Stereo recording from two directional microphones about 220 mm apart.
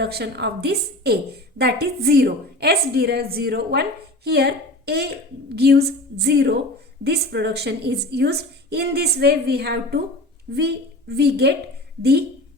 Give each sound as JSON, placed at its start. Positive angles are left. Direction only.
{"t": 0.0, "sound": "a woman's voice", "side_deg": -45}